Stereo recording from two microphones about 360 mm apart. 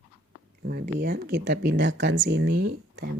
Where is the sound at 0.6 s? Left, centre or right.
Right.